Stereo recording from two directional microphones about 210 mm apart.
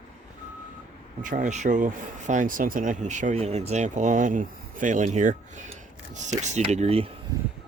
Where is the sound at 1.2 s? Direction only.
40° right (ahead or behind).